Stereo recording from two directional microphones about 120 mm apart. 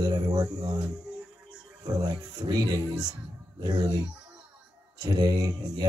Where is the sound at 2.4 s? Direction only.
35° right (ahead or behind).